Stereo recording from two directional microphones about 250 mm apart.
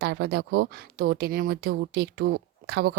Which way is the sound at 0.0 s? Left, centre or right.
Right.